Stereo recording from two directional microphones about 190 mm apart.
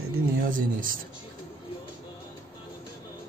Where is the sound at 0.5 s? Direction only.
45° right (ahead or behind).